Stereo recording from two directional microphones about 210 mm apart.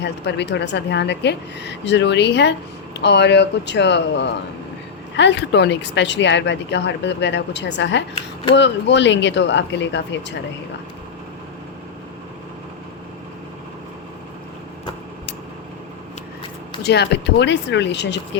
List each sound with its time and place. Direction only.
0.0 s speech: 55° left (ahead or behind)
16.8 s speech: 50° left (ahead or behind)